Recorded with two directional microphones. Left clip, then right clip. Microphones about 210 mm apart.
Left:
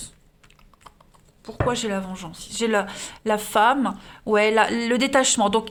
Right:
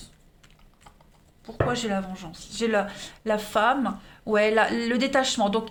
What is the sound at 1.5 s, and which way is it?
Speech, 35° left (ahead or behind).